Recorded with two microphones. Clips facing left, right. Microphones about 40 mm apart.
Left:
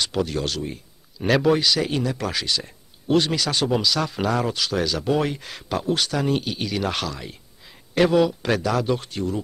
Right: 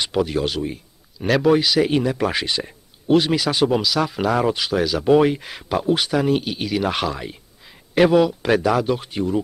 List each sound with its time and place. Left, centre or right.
0.0 s speech: centre
1.1 s speech: centre
1.6 s speech: centre
3.1 s speech: centre